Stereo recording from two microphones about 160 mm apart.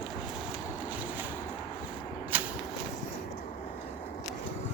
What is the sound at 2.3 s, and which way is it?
Whip, 10° right (ahead or behind).